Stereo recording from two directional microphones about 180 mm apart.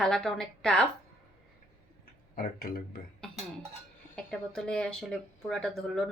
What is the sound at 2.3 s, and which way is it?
Speech, 50° left (ahead or behind).